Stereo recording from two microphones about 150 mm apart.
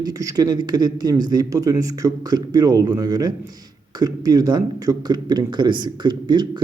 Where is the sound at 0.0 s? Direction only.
25° right (ahead or behind).